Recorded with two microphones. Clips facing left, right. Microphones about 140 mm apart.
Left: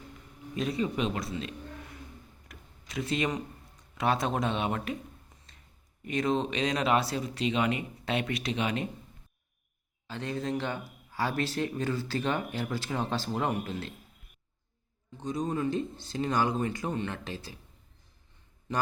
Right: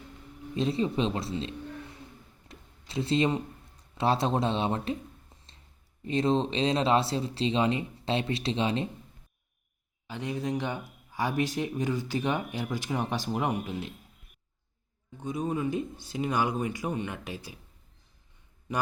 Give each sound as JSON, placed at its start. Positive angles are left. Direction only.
{"t": 0.5, "sound": "speech", "side_deg": -25}
{"t": 2.5, "sound": "a sound", "side_deg": -30}
{"t": 3.9, "sound": "speech", "side_deg": -30}
{"t": 10.1, "sound": "speech", "side_deg": -15}
{"t": 15.2, "sound": "speech", "side_deg": -10}